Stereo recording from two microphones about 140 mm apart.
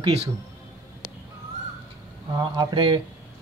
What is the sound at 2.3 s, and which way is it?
Speech, 35° right (ahead or behind).